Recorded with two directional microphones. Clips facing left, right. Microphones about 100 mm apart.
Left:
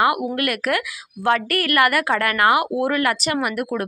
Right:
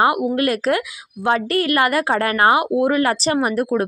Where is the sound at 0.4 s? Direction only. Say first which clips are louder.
Right 4 dB; 25° right (ahead or behind).